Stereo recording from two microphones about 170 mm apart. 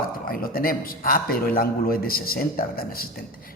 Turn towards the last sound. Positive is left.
turn(degrees=60)  # may be behind; listen again after turning